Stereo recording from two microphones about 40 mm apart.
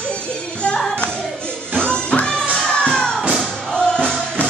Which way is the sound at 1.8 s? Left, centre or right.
Left.